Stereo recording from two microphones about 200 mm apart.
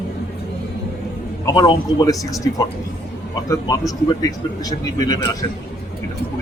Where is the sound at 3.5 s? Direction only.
15° left (ahead or behind).